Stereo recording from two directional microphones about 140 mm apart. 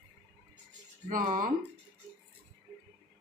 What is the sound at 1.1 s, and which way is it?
Speech, 75° right (ahead or behind).